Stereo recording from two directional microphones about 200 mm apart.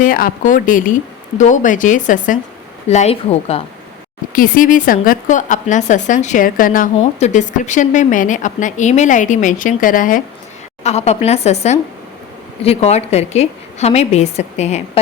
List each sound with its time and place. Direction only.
0.0 s a woman's voice: 45° left (ahead or behind)
4.3 s a woman's voice: 45° left (ahead or behind)